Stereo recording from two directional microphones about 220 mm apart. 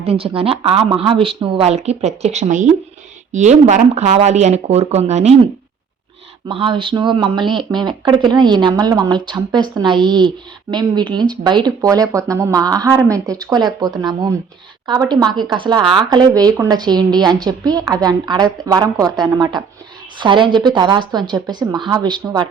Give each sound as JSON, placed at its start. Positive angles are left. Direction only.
{"t": 0.0, "sound": "speech", "side_deg": -25}
{"t": 6.5, "sound": "speech", "side_deg": -25}